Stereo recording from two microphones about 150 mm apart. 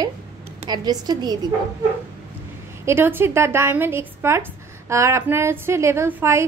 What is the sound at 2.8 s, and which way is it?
A woman's voice, 15° right (ahead or behind).